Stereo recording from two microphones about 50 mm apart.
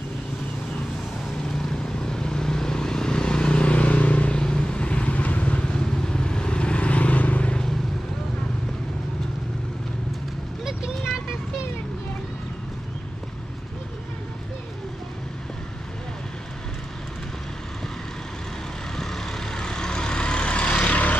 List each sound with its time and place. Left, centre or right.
1.4 s vehicle: centre; by 5.8 s left
5.8 s vehicle: centre
10.6 s vehicle: centre
18.9 s vehicle: centre; by 21.2 s left